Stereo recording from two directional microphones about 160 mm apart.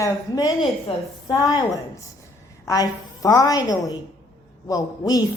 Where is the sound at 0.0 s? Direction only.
20° left (ahead or behind).